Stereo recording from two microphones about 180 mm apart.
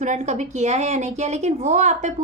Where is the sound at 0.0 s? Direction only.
40° right (ahead or behind).